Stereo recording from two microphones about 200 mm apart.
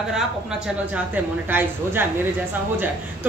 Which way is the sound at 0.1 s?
5° right (ahead or behind).